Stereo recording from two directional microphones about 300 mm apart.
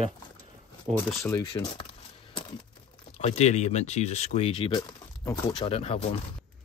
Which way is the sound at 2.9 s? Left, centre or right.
Centre.